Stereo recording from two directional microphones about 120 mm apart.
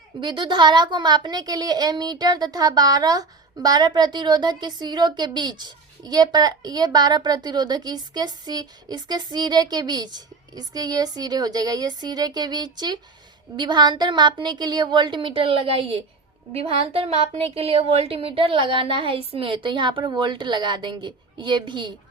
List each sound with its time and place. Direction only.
0.2 s a woman's voice: 40° right (ahead or behind)